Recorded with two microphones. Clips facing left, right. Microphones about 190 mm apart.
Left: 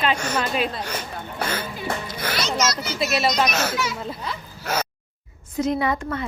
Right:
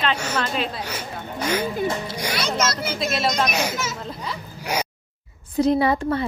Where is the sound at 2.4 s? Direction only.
55° right (ahead or behind).